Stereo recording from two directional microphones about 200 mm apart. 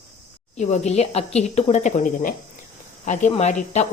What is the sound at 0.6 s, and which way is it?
A woman's voice, 35° left (ahead or behind).